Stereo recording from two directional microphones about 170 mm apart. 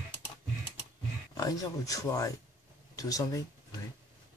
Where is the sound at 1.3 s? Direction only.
20° left (ahead or behind).